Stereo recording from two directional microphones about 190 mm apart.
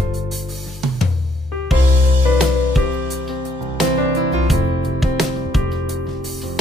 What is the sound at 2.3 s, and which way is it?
Music, centre (ahead or behind).